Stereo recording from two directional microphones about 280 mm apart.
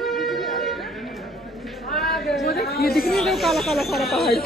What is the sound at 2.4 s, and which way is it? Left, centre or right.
Chatter, left.